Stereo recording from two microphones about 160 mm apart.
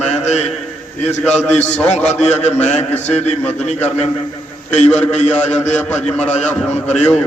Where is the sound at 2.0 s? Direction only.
45° left (ahead or behind).